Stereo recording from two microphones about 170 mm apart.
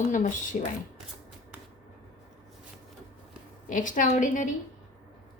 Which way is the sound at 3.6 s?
50° left (ahead or behind).